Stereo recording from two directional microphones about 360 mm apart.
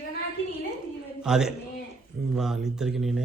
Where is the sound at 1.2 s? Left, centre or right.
Centre.